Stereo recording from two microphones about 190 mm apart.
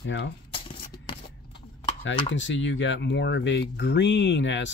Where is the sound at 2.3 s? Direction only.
75° left (ahead or behind).